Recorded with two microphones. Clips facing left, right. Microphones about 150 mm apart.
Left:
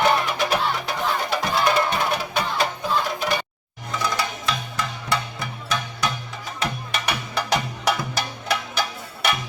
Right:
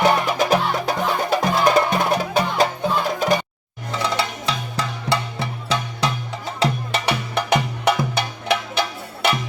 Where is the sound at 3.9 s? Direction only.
30° right (ahead or behind).